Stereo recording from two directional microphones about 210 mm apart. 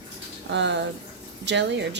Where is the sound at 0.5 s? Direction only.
55° right (ahead or behind).